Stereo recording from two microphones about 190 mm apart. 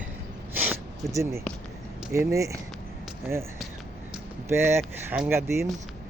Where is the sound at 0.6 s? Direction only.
10° right (ahead or behind).